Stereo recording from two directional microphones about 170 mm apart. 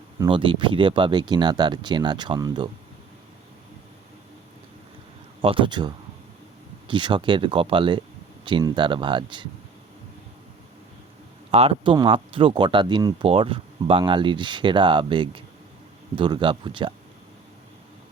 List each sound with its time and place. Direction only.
0.3 s speech: 30° right (ahead or behind)
5.4 s speech: 30° right (ahead or behind)
11.5 s speech: 35° right (ahead or behind)